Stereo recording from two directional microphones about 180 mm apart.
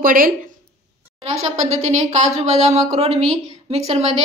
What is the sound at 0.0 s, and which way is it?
Speech, 50° right (ahead or behind).